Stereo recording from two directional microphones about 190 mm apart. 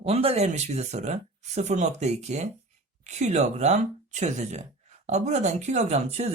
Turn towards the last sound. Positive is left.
turn(degrees=-35)  # may be behind; listen again after turning